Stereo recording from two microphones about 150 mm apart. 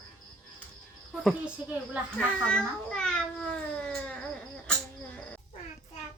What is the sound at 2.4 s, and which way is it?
Speech, 5° left (ahead or behind).